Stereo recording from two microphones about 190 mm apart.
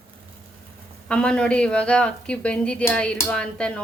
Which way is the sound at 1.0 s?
5° left (ahead or behind).